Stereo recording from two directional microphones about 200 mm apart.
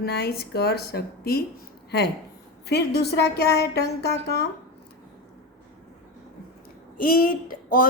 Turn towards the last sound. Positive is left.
turn(degrees=45)  # may be behind; listen again after turning